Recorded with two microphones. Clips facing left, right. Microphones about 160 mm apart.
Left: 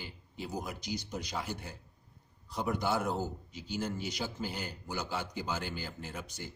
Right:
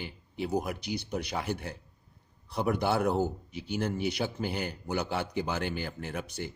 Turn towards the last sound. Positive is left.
turn(degrees=-65)  # may be behind; listen again after turning